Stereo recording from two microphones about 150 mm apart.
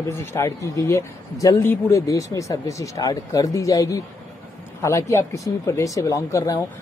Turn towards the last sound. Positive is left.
turn(degrees=20)  # may be behind; listen again after turning